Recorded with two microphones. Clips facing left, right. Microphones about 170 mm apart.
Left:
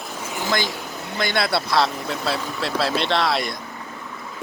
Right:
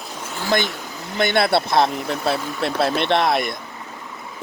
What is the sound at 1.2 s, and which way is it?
Speech, 55° right (ahead or behind).